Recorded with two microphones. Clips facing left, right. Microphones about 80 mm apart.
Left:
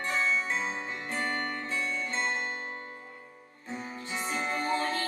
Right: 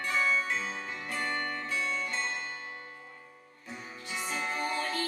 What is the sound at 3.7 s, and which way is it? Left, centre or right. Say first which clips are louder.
Music: left 4 dB; left.